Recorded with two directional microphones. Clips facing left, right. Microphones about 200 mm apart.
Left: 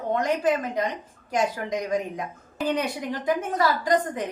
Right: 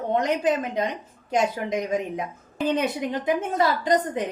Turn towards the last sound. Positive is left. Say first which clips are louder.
# right 1 dB
turn(degrees=-25)  # may be behind; listen again after turning